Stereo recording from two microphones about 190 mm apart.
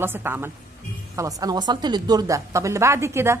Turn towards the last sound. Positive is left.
turn(degrees=-15)  # may be behind; listen again after turning